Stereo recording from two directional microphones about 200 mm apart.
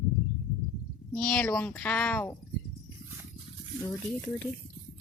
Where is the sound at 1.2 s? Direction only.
5° left (ahead or behind).